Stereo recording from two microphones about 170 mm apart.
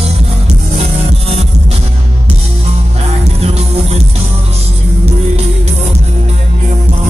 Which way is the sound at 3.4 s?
40° right (ahead or behind).